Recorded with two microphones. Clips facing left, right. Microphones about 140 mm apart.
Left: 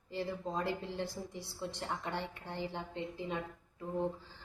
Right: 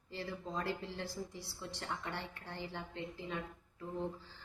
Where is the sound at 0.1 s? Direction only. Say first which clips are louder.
Left 4 dB; 15° left (ahead or behind).